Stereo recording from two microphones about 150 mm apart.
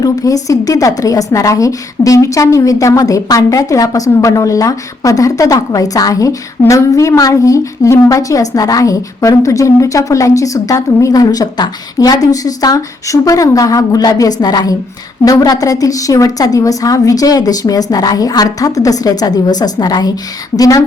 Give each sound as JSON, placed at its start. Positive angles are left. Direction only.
{"t": 0.0, "sound": "a woman's voice", "side_deg": 25}